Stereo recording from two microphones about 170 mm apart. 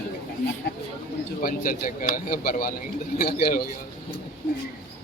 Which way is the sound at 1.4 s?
55° left (ahead or behind).